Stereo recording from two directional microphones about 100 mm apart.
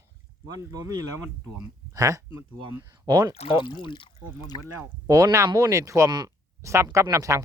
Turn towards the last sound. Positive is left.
turn(degrees=-30)  # may be behind; listen again after turning